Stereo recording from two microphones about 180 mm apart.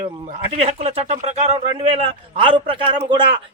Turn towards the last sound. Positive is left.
turn(degrees=-30)  # may be behind; listen again after turning